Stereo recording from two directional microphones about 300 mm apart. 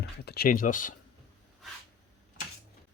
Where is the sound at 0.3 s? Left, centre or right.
Left.